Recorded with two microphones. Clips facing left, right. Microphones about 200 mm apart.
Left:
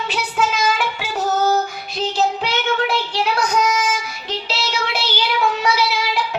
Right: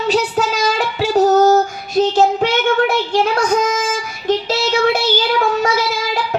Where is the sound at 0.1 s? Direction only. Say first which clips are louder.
Right 5 dB; 40° right (ahead or behind).